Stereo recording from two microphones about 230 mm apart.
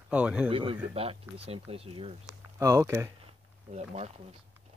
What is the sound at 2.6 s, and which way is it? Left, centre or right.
Speech, centre.